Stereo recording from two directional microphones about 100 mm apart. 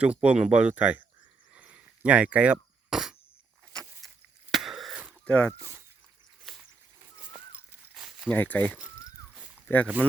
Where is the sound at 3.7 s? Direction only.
5° left (ahead or behind).